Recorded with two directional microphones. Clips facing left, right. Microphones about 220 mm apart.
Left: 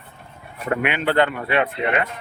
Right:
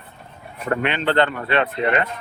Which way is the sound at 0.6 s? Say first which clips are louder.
Even; 10° left (ahead or behind).